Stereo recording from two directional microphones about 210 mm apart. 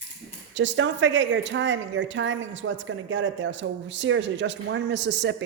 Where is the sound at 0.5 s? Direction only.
60° right (ahead or behind).